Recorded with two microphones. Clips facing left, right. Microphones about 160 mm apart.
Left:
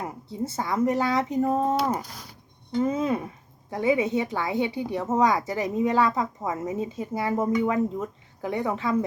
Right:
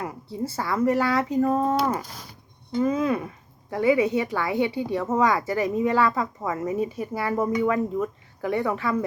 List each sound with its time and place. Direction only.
0.0 s a woman's voice: 20° left (ahead or behind)